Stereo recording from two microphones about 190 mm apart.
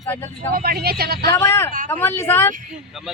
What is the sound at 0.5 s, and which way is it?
Speech, 50° right (ahead or behind).